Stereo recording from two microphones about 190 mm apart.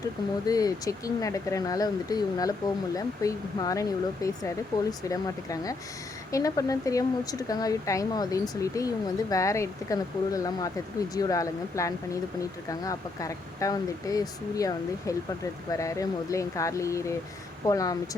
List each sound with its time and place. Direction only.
0.4 s speech: 20° left (ahead or behind)